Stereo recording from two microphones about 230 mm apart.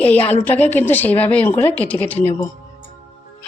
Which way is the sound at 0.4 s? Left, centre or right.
Centre.